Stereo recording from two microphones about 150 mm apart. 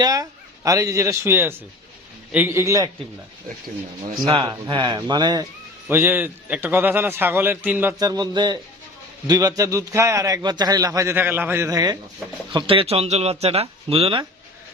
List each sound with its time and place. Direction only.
0.0 s a man's voice: 25° right (ahead or behind)
4.2 s a man's voice: 30° right (ahead or behind)
5.9 s a man's voice: 15° right (ahead or behind)
7.9 s a man's voice: 25° right (ahead or behind)
12.5 s speech: 35° right (ahead or behind)